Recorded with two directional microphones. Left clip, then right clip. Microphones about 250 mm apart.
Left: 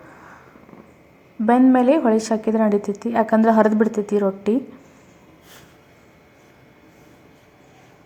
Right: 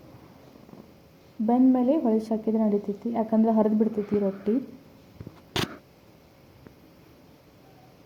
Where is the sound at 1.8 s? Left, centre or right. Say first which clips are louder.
Left 8 dB; left.